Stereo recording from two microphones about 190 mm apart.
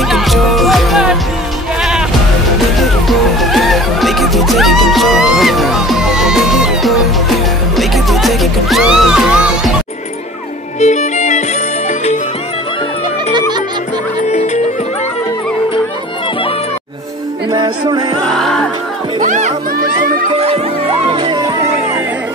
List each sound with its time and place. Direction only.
0.1 s music: centre (ahead or behind)
10.8 s music: 40° left (ahead or behind)
14.3 s music: 35° left (ahead or behind)
17.5 s music: 20° right (ahead or behind)
18.2 s music: centre (ahead or behind)
19.2 s music: 40° right (ahead or behind); by 21.6 s 25° right (ahead or behind)